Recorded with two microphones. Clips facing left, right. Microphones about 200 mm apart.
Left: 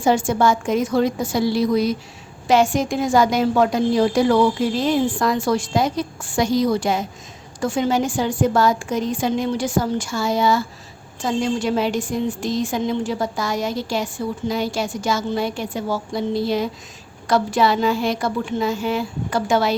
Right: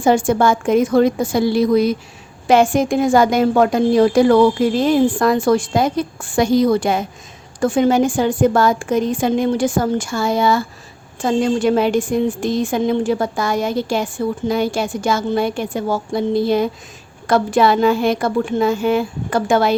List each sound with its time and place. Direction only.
0.0 s a woman's voice: 55° right (ahead or behind)